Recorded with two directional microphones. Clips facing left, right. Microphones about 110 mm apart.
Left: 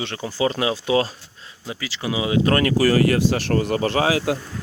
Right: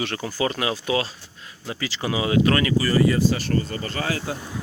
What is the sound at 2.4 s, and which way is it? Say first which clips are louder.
Speech: left 2 dB; 45° left (ahead or behind).